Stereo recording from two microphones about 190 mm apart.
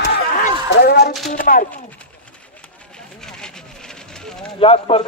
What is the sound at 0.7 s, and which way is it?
Speech, 55° left (ahead or behind).